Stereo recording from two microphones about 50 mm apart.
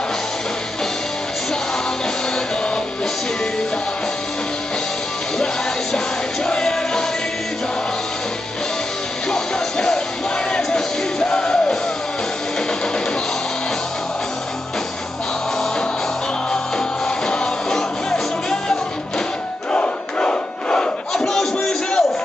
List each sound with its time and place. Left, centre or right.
6.4 s music: centre
9.3 s music: centre
17.3 s music: centre
19.7 s battle cry: left